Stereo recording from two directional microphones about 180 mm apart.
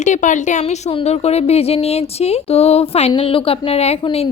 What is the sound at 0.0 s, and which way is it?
A woman's voice, 45° left (ahead or behind).